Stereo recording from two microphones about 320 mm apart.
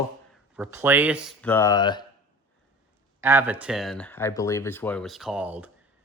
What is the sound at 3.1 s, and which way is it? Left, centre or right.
Speech, centre.